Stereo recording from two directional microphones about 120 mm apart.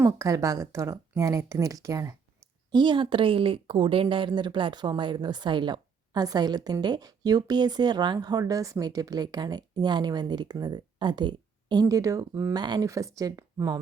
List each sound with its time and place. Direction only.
0.0 s speech: 25° right (ahead or behind)
2.7 s speech: 40° right (ahead or behind); by 12.5 s 25° right (ahead or behind)
12.5 s speech: 35° right (ahead or behind)